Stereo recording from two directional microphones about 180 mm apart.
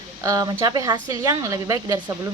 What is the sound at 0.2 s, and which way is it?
Speech, 20° right (ahead or behind).